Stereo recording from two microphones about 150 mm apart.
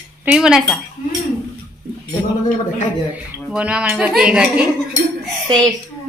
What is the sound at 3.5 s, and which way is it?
Speech, 10° right (ahead or behind).